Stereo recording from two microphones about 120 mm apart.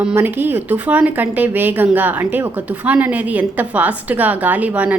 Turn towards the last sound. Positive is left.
turn(degrees=-10)  # may be behind; listen again after turning